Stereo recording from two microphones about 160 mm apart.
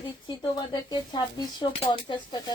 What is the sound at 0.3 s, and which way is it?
Speech, 25° left (ahead or behind).